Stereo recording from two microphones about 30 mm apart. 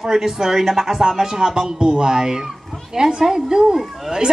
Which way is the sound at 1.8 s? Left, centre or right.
Right.